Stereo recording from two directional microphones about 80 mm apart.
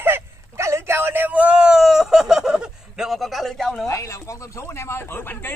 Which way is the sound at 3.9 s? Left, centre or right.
Left.